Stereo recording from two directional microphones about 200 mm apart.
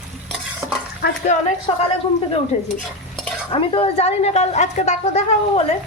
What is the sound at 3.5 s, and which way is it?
A woman's voice, 25° left (ahead or behind).